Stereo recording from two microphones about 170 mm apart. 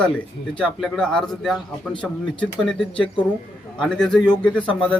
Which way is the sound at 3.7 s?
5° left (ahead or behind).